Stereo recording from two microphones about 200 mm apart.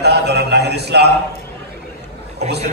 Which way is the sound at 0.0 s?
55° right (ahead or behind).